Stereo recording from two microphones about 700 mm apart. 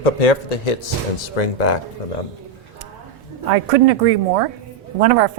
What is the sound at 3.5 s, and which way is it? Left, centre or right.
Speech, right.